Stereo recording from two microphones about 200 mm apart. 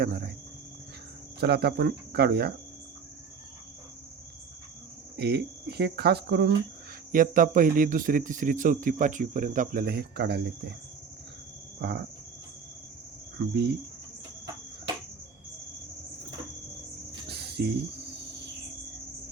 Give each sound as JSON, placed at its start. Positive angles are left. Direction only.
{"t": 0.0, "sound": "speech", "side_deg": -50}
{"t": 1.4, "sound": "speech", "side_deg": -55}
{"t": 5.1, "sound": "speech", "side_deg": -55}
{"t": 7.1, "sound": "speech", "side_deg": -40}
{"t": 11.8, "sound": "speech", "side_deg": -55}
{"t": 13.4, "sound": "speech", "side_deg": -55}
{"t": 17.1, "sound": "cricket", "side_deg": -55}